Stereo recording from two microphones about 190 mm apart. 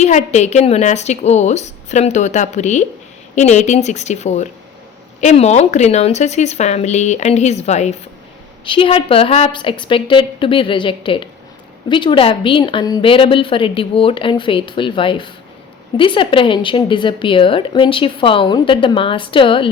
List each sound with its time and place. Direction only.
0.0 s a woman's voice: 35° left (ahead or behind)